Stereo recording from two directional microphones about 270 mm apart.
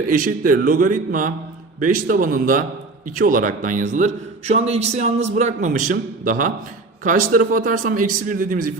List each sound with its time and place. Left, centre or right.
0.1 s a man's voice: right